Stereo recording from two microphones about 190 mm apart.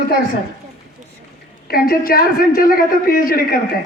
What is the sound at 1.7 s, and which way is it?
A woman's voice, 50° left (ahead or behind).